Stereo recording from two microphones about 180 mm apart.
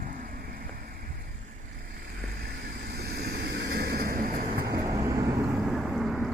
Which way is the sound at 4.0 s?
50° right (ahead or behind).